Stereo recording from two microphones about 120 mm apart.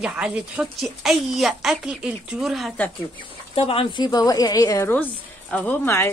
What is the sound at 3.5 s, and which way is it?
Speech, 50° left (ahead or behind).